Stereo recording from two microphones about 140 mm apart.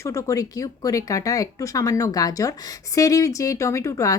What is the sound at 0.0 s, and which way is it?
Speech, 20° left (ahead or behind).